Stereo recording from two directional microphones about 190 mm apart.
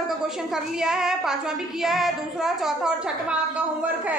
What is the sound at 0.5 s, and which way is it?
Child singing, 5° right (ahead or behind).